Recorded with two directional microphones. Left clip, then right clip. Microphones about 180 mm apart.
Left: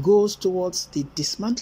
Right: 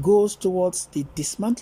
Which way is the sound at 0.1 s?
10° right (ahead or behind).